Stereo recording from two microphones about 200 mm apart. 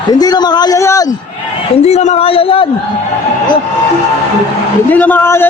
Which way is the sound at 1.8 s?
35° left (ahead or behind).